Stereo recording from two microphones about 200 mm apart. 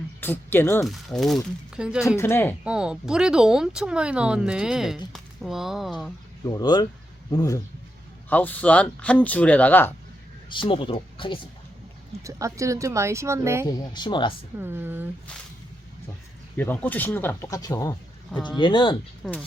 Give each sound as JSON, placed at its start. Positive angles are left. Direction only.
{"t": 0.2, "sound": "speech", "side_deg": 10}
{"t": 0.9, "sound": "speech", "side_deg": 0}
{"t": 2.1, "sound": "speech", "side_deg": 10}
{"t": 2.6, "sound": "speech", "side_deg": -5}
{"t": 6.4, "sound": "speech", "side_deg": 20}
{"t": 10.5, "sound": "speech", "side_deg": 25}
{"t": 12.2, "sound": "speech", "side_deg": -15}
{"t": 13.7, "sound": "speech", "side_deg": 20}
{"t": 14.6, "sound": "speech", "side_deg": -10}
{"t": 16.6, "sound": "speech", "side_deg": 10}
{"t": 19.2, "sound": "speech", "side_deg": 0}